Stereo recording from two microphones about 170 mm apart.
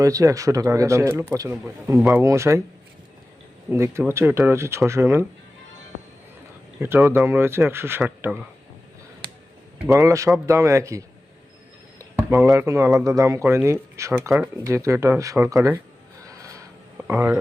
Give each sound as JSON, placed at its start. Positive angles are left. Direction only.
{"t": 0.0, "sound": "speech", "side_deg": -20}
{"t": 3.7, "sound": "speech", "side_deg": -15}
{"t": 6.7, "sound": "speech", "side_deg": -15}
{"t": 9.9, "sound": "speech", "side_deg": -20}
{"t": 11.9, "sound": "a sound", "side_deg": -15}
{"t": 12.5, "sound": "speech", "side_deg": -15}
{"t": 16.2, "sound": "music", "side_deg": -20}
{"t": 17.1, "sound": "speech", "side_deg": -15}